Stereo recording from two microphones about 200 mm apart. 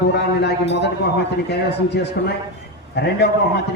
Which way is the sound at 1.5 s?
55° left (ahead or behind).